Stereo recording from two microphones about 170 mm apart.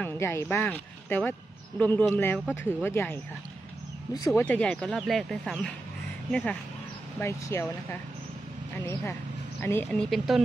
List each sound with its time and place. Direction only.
0.0 s speech: 15° left (ahead or behind)
4.4 s a woman's voice: 5° left (ahead or behind)